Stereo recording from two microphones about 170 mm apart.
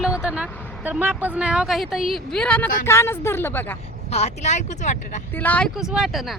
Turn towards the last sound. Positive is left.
turn(degrees=0)  # may be behind; listen again after turning